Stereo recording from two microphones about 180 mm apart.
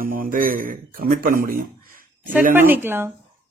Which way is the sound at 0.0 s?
50° right (ahead or behind).